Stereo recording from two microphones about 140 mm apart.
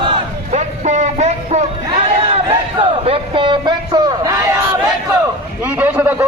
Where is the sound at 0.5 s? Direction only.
55° right (ahead or behind).